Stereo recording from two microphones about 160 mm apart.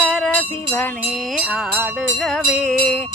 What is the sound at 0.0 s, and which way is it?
Music, 5° right (ahead or behind).